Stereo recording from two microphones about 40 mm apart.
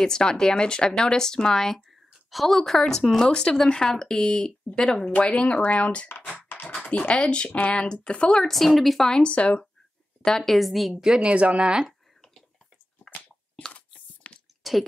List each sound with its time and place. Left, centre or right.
0.0 s speech: centre
5.1 s speech: left
8.4 s speech: centre
9.1 s speech: left
10.4 s speech: centre
10.9 s speech: centre
11.2 s speech: right
13.7 s a sound: left
14.6 s a sound: centre